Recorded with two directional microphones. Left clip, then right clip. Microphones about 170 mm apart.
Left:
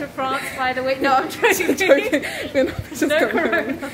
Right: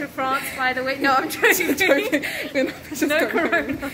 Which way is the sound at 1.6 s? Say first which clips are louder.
Left 3 dB; 15° left (ahead or behind).